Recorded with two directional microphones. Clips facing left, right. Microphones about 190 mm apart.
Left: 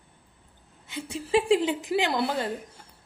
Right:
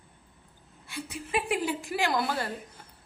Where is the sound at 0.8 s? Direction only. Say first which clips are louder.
Left 6 dB; 25° left (ahead or behind).